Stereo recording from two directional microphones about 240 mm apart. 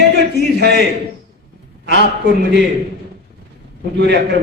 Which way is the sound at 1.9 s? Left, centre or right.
Right.